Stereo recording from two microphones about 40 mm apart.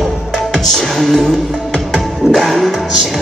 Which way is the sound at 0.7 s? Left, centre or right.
Centre.